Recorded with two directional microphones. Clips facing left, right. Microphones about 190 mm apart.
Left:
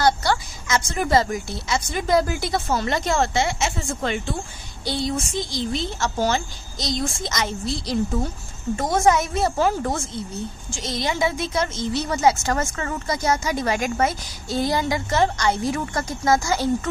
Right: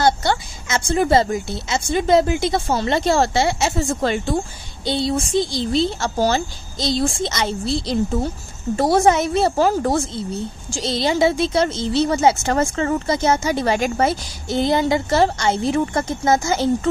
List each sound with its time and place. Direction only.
0.0 s a woman's voice: 25° right (ahead or behind)